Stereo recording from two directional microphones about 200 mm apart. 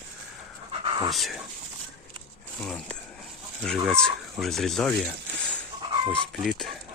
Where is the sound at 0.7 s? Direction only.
25° right (ahead or behind).